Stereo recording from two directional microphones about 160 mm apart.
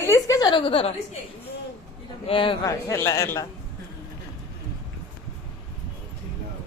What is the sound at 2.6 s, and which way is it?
Speech, 20° left (ahead or behind).